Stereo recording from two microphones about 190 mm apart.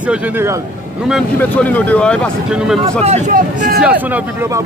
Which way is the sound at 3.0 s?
40° right (ahead or behind).